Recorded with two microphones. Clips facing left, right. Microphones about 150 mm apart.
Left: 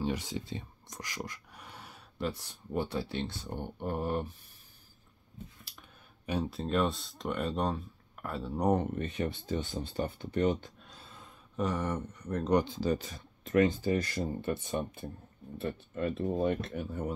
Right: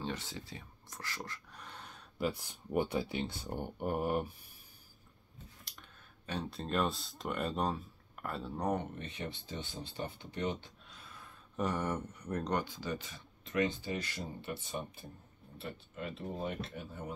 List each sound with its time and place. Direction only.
0.0 s speech: 10° left (ahead or behind)
0.5 s whispering: 20° left (ahead or behind)
2.1 s speech: 10° right (ahead or behind)
5.7 s speech: 10° left (ahead or behind)
8.9 s speech: 50° left (ahead or behind)
11.0 s a sound: 25° left (ahead or behind)
11.5 s speech: centre (ahead or behind)
12.6 s speech: 30° left (ahead or behind); by 17.1 s 50° left (ahead or behind)